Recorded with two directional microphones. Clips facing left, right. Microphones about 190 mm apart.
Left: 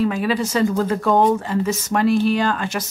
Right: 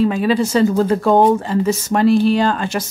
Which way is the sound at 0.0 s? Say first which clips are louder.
Right 4 dB; 30° right (ahead or behind).